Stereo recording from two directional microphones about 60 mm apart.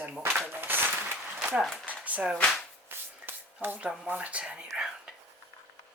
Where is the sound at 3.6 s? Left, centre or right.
Right.